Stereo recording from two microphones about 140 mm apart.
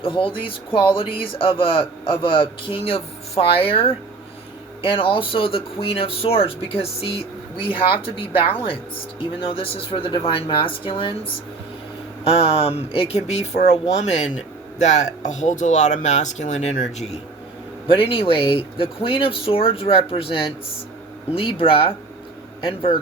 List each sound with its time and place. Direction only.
0.0 s speech: 40° left (ahead or behind)
12.2 s speech: 45° left (ahead or behind)
18.1 s speech: 40° left (ahead or behind)